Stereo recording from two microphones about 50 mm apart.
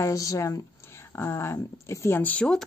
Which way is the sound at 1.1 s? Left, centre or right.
Left.